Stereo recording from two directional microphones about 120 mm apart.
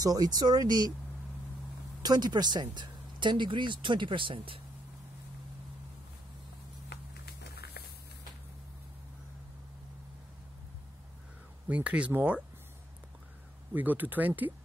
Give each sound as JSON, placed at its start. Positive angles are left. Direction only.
{"t": 0.0, "sound": "speech", "side_deg": -30}
{"t": 2.0, "sound": "speech", "side_deg": -35}
{"t": 11.7, "sound": "speech", "side_deg": -10}
{"t": 13.7, "sound": "speech", "side_deg": -15}